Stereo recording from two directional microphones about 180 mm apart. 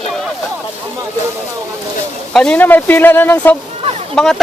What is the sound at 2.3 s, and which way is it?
A man's voice, 5° left (ahead or behind).